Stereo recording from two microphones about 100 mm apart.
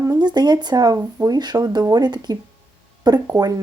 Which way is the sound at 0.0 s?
40° right (ahead or behind).